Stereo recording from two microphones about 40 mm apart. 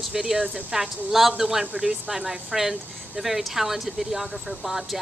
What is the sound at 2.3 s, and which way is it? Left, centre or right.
Speech, centre.